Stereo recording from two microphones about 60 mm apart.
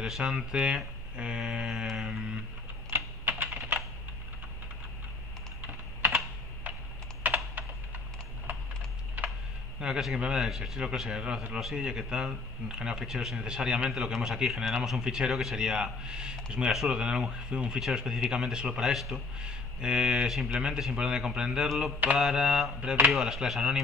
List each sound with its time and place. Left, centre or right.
0.0 s speech: centre
1.9 s a sound: centre
2.9 s typing: right
7.2 s computer keyboard: right
9.8 s speech: centre